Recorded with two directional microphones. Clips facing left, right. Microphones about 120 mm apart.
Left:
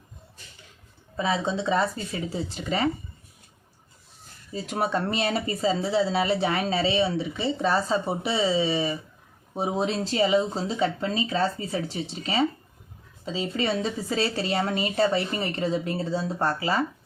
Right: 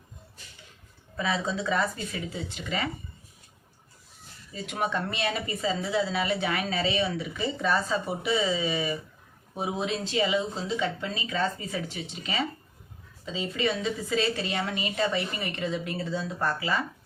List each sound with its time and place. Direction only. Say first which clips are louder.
1.1 s speech: left 3 dB; 25° left (ahead or behind)
4.5 s speech: left 3 dB; 35° left (ahead or behind)